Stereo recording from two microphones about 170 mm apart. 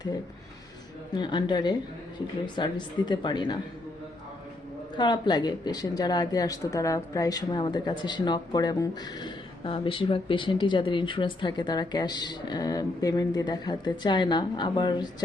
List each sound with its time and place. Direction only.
1.1 s speech: 25° left (ahead or behind)
4.9 s speech: 25° left (ahead or behind)